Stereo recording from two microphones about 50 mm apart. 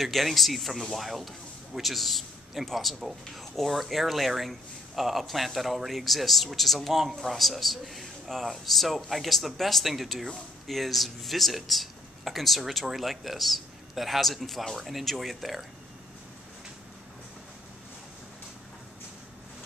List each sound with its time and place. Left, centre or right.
0.0 s a man's voice: centre